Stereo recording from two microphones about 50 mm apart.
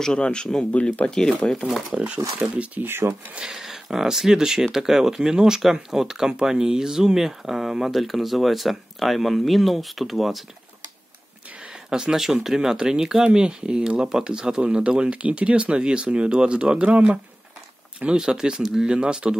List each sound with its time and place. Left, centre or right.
0.0 s speech: centre
2.4 s speech: right
2.8 s speech: right
3.3 s speech: centre
11.9 s speech: centre